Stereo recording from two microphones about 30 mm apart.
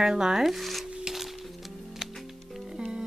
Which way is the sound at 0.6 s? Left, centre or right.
Centre.